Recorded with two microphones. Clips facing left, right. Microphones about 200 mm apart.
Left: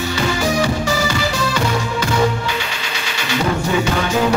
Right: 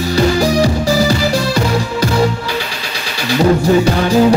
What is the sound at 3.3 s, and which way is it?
Music, 35° right (ahead or behind).